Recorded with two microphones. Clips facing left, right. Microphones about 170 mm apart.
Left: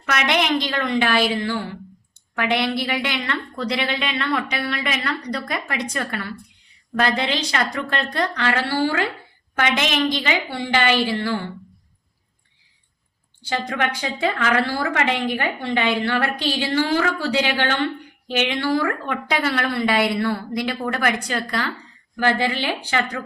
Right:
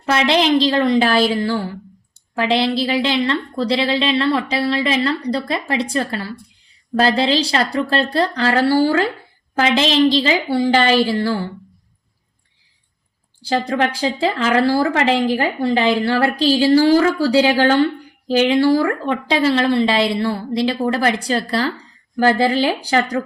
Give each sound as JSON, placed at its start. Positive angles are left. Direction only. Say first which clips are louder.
{"t": 0.0, "sound": "a woman's voice", "louder": "right 6 dB", "side_deg": -30}
{"t": 13.5, "sound": "a woman's voice", "louder": "right 6 dB", "side_deg": -35}